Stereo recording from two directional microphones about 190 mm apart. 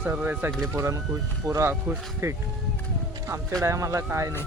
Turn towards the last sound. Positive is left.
turn(degrees=-15)  # may be behind; listen again after turning